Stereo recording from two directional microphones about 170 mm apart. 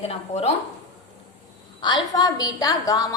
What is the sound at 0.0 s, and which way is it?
Speech, 35° left (ahead or behind).